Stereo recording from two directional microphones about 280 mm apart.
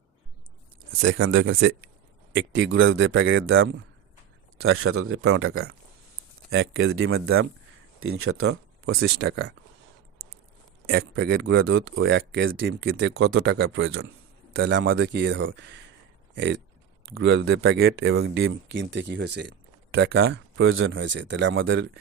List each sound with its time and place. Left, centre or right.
1.0 s speech: right
10.8 s speech: right
20.6 s speech: right